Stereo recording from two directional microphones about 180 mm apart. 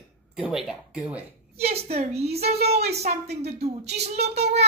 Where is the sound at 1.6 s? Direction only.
35° right (ahead or behind).